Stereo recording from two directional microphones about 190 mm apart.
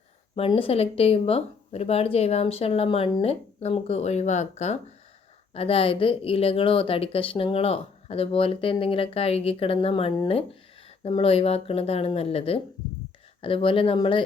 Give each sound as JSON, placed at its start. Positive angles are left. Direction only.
{"t": 0.3, "sound": "speech", "side_deg": 30}